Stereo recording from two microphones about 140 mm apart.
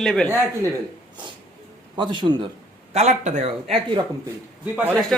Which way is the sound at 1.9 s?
35° right (ahead or behind).